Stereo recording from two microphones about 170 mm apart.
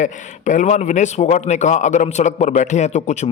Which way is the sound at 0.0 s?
45° left (ahead or behind).